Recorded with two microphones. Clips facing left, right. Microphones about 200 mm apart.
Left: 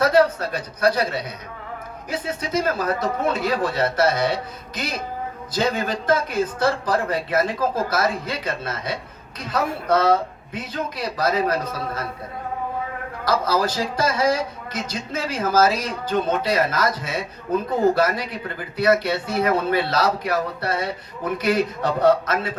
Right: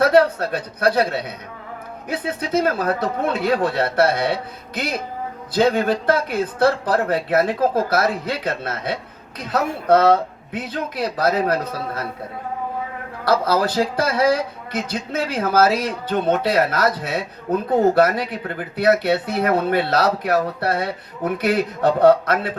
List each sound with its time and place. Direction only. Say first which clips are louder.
0.0 s speech: right 2 dB; 60° right (ahead or behind)
13.2 s speech: right 3 dB; 60° right (ahead or behind)